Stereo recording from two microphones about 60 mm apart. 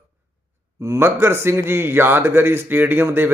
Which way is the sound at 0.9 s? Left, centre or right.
Right.